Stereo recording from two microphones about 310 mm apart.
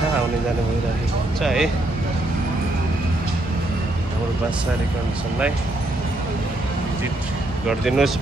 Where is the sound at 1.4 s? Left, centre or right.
Centre.